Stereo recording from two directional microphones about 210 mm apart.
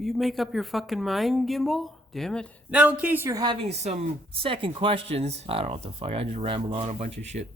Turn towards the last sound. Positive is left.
turn(degrees=-30)  # may be behind; listen again after turning